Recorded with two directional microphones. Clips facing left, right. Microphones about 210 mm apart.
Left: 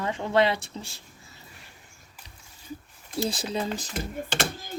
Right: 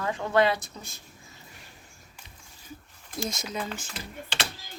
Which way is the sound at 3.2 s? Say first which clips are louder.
Left 5 dB; 30° left (ahead or behind).